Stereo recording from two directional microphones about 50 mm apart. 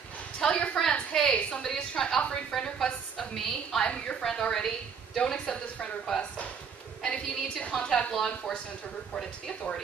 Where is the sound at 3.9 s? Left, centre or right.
Centre.